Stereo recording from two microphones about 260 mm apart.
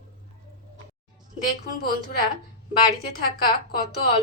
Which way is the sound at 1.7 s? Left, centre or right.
Left.